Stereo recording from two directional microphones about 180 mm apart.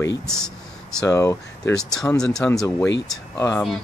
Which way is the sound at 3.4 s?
15° left (ahead or behind).